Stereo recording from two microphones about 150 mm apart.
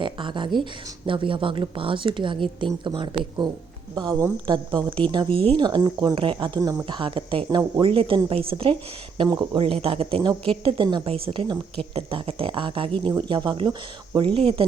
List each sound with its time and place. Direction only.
0.0 s speech: 35° right (ahead or behind)